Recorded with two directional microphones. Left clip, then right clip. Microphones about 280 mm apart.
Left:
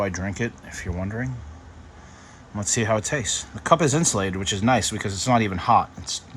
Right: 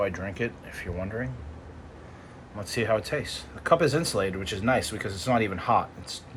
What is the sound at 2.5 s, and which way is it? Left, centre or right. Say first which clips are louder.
Speech: left 3 dB; centre.